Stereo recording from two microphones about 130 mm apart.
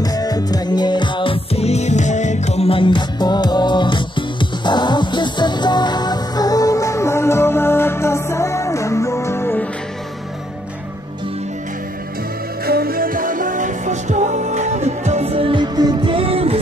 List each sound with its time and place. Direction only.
0.0 s music: 30° left (ahead or behind)
13.0 s music: 90° right; by 16.5 s 45° right (ahead or behind)